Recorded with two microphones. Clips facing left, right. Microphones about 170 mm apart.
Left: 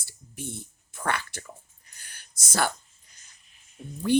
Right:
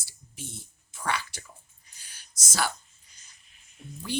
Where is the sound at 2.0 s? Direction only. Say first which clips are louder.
Left 1 dB; 55° left (ahead or behind).